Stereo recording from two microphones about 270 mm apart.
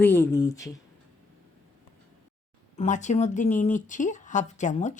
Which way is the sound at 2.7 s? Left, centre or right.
Left.